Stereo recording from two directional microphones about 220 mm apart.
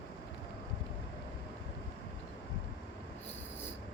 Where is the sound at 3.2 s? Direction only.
10° left (ahead or behind).